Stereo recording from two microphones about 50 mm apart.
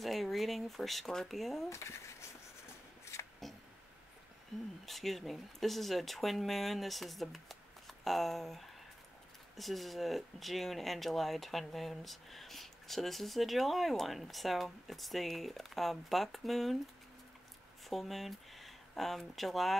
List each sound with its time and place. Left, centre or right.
0.0 s speech: centre
1.7 s speech: left
3.1 s a sound: left
4.8 s speech: centre
17.8 s speech: centre